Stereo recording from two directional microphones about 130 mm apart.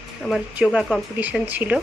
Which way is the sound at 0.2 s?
Centre (ahead or behind).